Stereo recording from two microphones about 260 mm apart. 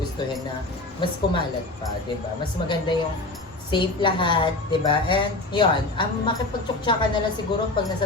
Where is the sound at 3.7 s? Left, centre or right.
Centre.